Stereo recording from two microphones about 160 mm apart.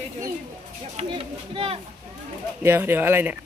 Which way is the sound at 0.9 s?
35° right (ahead or behind).